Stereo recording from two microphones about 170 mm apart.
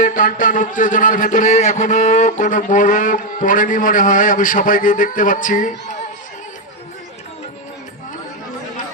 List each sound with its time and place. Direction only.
0.0 s a man's voice: 50° left (ahead or behind)